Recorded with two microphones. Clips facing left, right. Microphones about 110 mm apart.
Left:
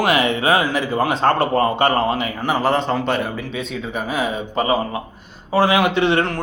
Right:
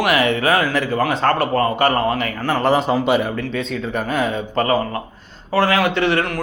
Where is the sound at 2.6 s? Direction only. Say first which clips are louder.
Right 3 dB; 5° right (ahead or behind).